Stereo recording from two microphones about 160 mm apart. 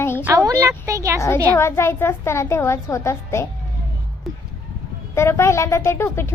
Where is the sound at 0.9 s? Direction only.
20° right (ahead or behind).